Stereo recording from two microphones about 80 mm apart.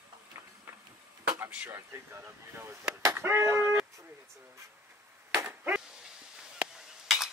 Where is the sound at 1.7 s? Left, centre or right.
Right.